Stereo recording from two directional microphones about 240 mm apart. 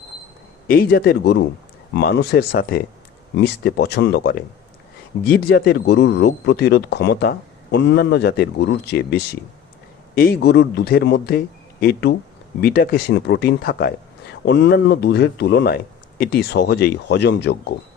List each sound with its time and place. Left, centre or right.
0.7 s speech: left